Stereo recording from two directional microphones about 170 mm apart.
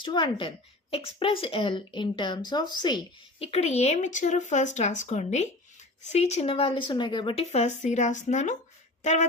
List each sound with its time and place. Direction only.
0.0 s a woman's voice: 25° left (ahead or behind); by 9.2 s 45° left (ahead or behind)